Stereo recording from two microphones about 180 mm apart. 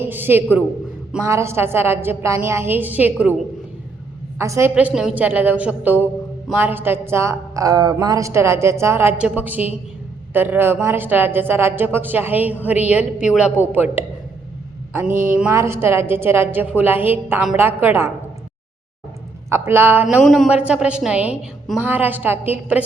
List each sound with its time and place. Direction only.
0.0 s a woman's voice: 10° right (ahead or behind)
4.4 s a woman's voice: 15° right (ahead or behind)
15.3 s a woman's voice: 15° right (ahead or behind)
19.5 s a woman's voice: 15° right (ahead or behind)